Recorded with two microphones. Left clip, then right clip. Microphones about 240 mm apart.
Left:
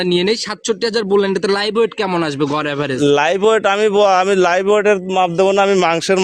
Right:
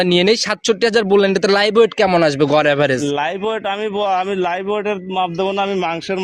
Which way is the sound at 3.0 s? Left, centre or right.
Left.